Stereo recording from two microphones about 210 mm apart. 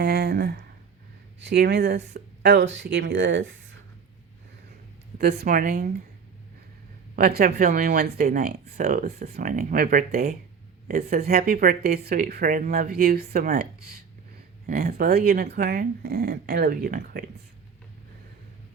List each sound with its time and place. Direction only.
0.0 s speech: 50° right (ahead or behind)
5.4 s speech: 40° right (ahead or behind)
7.2 s speech: 45° right (ahead or behind)
14.7 s speech: 45° right (ahead or behind)